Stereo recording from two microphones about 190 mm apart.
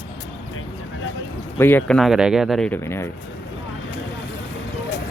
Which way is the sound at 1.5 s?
10° left (ahead or behind).